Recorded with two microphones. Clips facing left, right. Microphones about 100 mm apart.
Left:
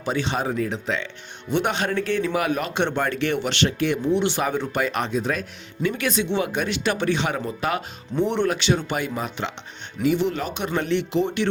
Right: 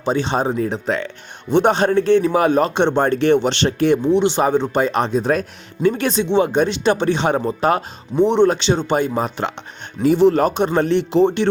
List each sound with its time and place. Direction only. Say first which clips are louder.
0.0 s speech: right 6 dB; 30° right (ahead or behind)
1.5 s speech: right 8 dB; 30° right (ahead or behind)
8.1 s speech: right 8 dB; 20° right (ahead or behind)